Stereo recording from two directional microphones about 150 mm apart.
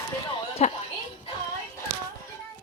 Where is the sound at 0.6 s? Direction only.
55° left (ahead or behind).